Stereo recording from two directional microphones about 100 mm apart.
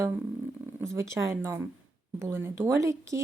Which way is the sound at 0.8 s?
25° right (ahead or behind).